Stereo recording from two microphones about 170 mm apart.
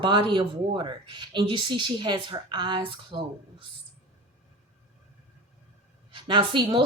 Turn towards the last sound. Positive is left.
turn(degrees=-30)  # may be behind; listen again after turning